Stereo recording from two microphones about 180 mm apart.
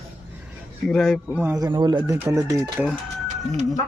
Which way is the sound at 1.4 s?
10° right (ahead or behind).